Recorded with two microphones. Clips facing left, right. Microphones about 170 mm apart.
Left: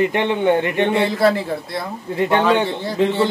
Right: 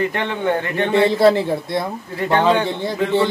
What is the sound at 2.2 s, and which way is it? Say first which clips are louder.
Speech: left 2 dB; 20° left (ahead or behind).